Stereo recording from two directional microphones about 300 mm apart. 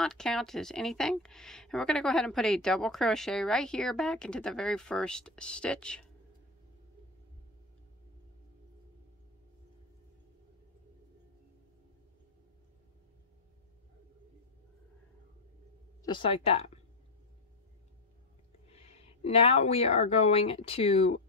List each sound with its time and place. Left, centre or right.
0.0 s speech: centre
16.0 s speech: centre
18.7 s speech: centre